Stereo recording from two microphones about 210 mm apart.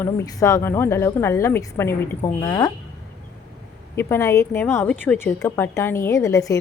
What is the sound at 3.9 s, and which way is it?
A woman's voice, 10° left (ahead or behind).